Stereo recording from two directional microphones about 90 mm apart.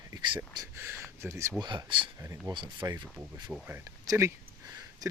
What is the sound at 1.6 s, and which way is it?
Speech, 55° right (ahead or behind).